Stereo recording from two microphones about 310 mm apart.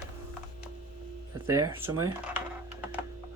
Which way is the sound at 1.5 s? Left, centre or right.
Centre.